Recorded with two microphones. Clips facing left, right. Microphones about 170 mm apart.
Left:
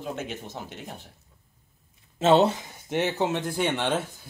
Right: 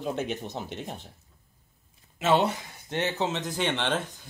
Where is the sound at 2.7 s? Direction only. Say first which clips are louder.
Left 3 dB; 15° left (ahead or behind).